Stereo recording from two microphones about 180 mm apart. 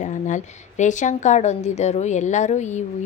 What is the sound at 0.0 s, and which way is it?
A woman's voice, 45° left (ahead or behind).